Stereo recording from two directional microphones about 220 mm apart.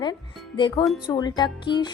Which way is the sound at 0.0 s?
20° left (ahead or behind).